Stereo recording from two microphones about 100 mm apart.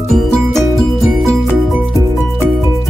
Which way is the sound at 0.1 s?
Centre (ahead or behind).